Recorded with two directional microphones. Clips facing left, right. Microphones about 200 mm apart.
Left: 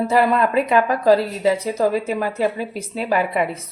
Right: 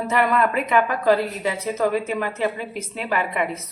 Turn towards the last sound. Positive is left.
turn(degrees=35)  # may be behind; listen again after turning